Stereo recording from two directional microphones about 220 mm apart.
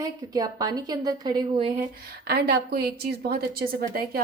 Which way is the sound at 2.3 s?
45° right (ahead or behind).